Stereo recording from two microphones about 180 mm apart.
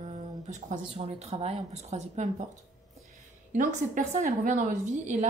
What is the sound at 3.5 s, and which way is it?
A woman's voice, 45° right (ahead or behind).